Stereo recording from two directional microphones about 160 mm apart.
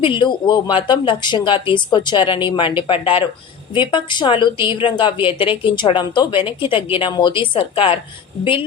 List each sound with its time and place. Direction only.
0.0 s a woman's voice: 30° left (ahead or behind)